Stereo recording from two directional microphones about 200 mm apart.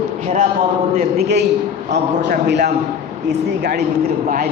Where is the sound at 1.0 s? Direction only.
55° right (ahead or behind).